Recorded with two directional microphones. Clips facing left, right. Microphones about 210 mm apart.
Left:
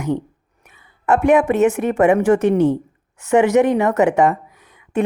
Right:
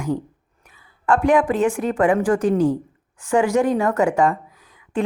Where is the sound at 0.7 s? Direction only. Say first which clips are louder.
Left 2 dB; 20° left (ahead or behind).